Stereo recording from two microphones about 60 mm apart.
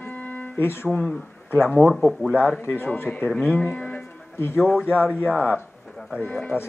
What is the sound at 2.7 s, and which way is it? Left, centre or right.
Speech, left.